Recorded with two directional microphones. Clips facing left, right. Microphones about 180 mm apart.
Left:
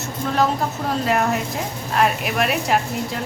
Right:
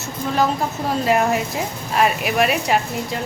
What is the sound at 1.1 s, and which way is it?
A woman's voice, 5° right (ahead or behind).